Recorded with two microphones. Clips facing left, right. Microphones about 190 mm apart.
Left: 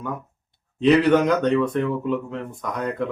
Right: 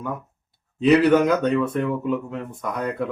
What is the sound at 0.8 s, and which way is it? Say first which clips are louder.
A man's voice: right 1 dB; 5° right (ahead or behind).